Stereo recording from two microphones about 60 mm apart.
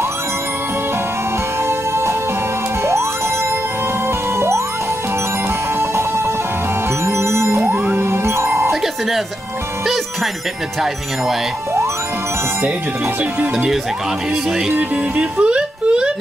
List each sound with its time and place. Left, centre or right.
1.7 s music: right
5.8 s music: right
7.6 s music: right
13.2 s speech: right
15.1 s a sound: centre